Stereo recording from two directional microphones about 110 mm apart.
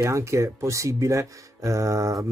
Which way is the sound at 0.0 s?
25° right (ahead or behind).